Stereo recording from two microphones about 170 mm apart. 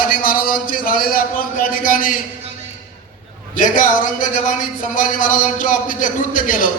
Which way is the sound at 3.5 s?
50° left (ahead or behind).